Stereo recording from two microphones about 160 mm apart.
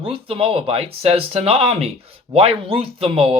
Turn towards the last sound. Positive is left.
turn(degrees=-35)  # may be behind; listen again after turning